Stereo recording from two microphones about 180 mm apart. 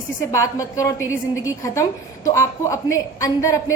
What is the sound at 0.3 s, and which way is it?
A woman's voice, 15° left (ahead or behind).